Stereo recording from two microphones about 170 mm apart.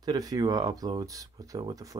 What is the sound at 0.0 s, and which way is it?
Speech, 20° right (ahead or behind).